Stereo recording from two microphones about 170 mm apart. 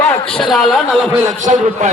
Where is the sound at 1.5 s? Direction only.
45° right (ahead or behind).